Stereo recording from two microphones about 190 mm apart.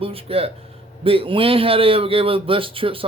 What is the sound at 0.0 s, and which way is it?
A man's voice, 30° right (ahead or behind).